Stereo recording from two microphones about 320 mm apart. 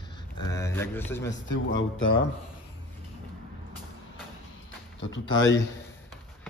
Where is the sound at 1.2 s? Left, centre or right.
Left.